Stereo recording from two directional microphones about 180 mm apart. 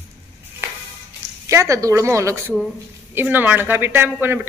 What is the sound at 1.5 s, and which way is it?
Speech, 15° right (ahead or behind).